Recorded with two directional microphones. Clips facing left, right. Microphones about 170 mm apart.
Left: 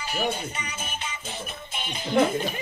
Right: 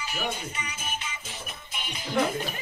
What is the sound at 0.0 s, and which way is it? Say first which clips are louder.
Music: left 4 dB; 30° left (ahead or behind).